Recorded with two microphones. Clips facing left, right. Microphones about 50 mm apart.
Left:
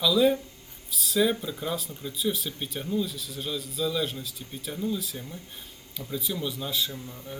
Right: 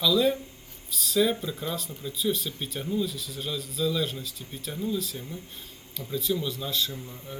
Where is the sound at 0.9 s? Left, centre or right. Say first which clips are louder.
Even; centre.